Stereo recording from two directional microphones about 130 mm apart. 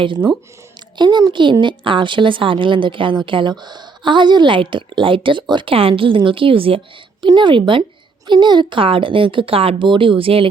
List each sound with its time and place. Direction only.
0.9 s a woman's voice: 35° right (ahead or behind)